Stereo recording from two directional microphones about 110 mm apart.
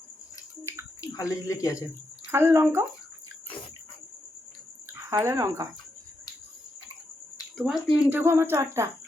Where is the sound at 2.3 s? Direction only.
25° right (ahead or behind).